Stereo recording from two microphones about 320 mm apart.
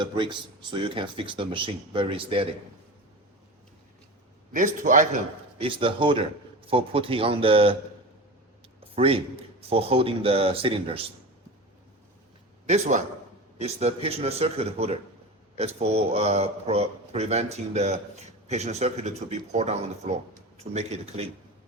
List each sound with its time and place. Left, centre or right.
0.0 s a man's voice: centre
4.5 s a man's voice: right
8.8 s a man's voice: centre
12.6 s a man's voice: right